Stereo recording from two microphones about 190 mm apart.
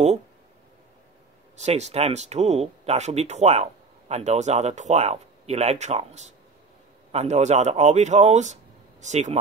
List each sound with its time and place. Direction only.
1.6 s speech: 35° right (ahead or behind)